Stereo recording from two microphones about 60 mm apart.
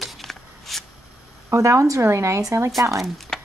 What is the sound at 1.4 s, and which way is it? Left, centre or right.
A woman's voice, right.